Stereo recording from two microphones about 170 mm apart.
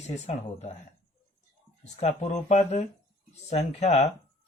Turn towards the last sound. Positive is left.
turn(degrees=40)  # may be behind; listen again after turning